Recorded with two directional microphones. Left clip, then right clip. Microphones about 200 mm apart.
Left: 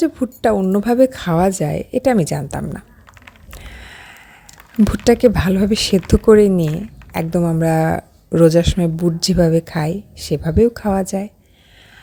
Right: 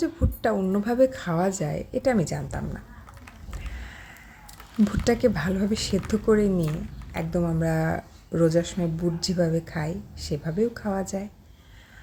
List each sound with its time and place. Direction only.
0.0 s a woman's voice: 40° left (ahead or behind)
3.5 s a sound: 40° left (ahead or behind)
4.8 s a woman's voice: 40° left (ahead or behind)